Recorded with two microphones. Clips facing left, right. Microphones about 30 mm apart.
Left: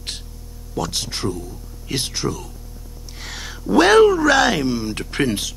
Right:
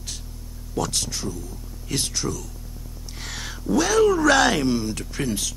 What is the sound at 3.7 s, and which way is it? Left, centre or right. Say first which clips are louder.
Speech: left 8 dB; left.